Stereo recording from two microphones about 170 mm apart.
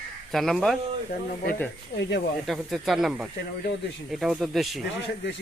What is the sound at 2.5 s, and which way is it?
Speech, centre (ahead or behind).